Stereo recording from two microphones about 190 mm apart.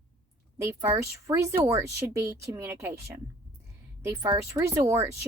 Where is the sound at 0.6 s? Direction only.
15° right (ahead or behind).